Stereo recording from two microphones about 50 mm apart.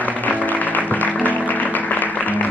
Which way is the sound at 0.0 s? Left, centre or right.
Left.